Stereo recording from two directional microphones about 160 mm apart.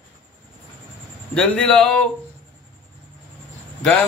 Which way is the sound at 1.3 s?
5° left (ahead or behind).